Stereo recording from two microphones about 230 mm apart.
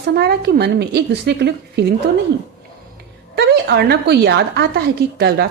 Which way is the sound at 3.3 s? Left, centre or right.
Right.